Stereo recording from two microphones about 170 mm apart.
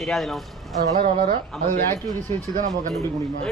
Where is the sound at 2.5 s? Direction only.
50° right (ahead or behind).